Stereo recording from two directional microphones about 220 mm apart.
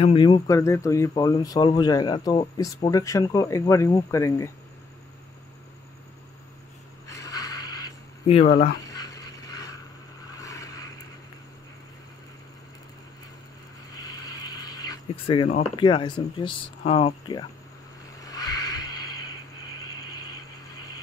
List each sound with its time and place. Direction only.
0.0 s speech: 20° left (ahead or behind)
7.1 s a sound: 15° left (ahead or behind)
8.5 s speech: 45° left (ahead or behind)
8.9 s dog: 15° left (ahead or behind)
10.3 s vehicle: 15° left (ahead or behind)
14.0 s speech: 15° left (ahead or behind)
18.2 s a sound: 15° left (ahead or behind)